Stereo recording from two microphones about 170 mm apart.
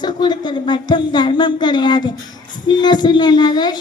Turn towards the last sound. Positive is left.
turn(degrees=25)  # may be behind; listen again after turning